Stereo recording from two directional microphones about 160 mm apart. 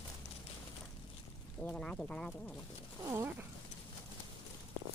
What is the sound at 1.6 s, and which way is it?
Speech, 10° left (ahead or behind).